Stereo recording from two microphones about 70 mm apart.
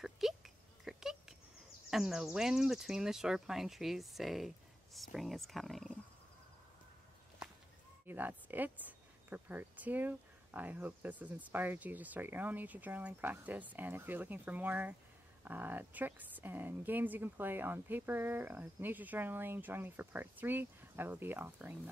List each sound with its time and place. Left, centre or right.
0.0 s a sound: centre
1.9 s speech: centre
8.1 s speech: right